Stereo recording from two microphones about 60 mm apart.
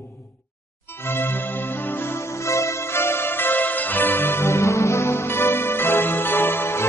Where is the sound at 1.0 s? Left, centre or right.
Left.